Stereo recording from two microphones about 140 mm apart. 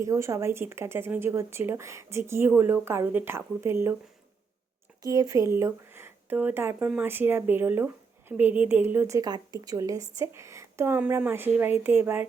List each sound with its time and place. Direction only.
0.0 s speech: 20° right (ahead or behind)
5.0 s a woman's voice: 25° right (ahead or behind)